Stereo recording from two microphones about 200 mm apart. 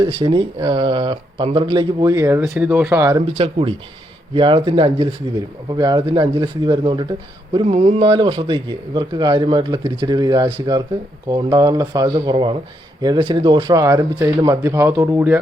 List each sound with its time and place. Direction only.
0.0 s speech: 20° right (ahead or behind)
3.3 s speech: 30° right (ahead or behind); by 15.4 s 10° right (ahead or behind)